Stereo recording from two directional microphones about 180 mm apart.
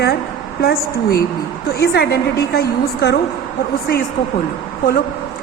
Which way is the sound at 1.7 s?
65° left (ahead or behind).